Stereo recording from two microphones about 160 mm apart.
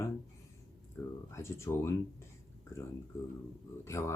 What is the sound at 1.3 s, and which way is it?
Speech, 15° left (ahead or behind).